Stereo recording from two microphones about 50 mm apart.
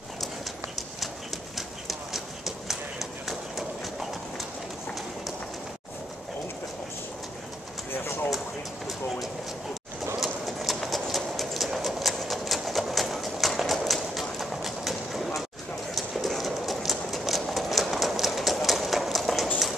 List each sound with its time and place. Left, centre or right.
1.9 s clip-clop: centre
7.9 s a sound: left
10.2 s clip-clop: centre